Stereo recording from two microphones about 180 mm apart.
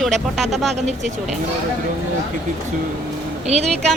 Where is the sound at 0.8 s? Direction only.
40° right (ahead or behind).